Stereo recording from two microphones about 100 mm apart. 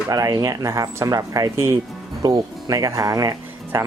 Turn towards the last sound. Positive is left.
turn(degrees=-25)  # may be behind; listen again after turning